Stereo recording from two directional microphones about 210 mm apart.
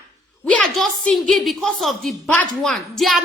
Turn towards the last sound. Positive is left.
turn(degrees=0)  # may be behind; listen again after turning